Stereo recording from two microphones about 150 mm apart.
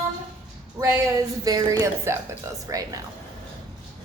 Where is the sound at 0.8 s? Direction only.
25° right (ahead or behind).